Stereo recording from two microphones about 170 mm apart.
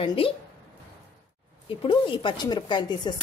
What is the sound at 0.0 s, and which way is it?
Speech, 30° left (ahead or behind).